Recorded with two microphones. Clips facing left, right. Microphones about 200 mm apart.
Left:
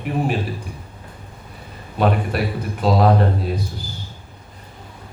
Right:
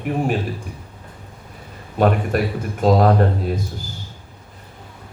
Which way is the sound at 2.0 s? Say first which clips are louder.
Right 2 dB; 45° right (ahead or behind).